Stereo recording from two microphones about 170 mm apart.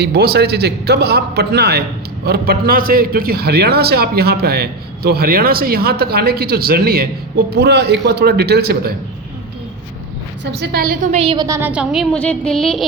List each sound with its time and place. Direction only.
0.0 s a man's voice: 70° right (ahead or behind)
10.4 s a man's voice: 70° right (ahead or behind)
11.0 s a woman's voice: 40° right (ahead or behind)
11.3 s a woman's voice: 15° right (ahead or behind); by 12.8 s centre (ahead or behind)